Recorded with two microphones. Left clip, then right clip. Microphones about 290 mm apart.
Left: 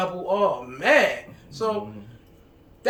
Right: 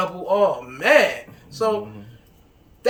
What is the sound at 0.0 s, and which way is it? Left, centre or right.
Speech, centre.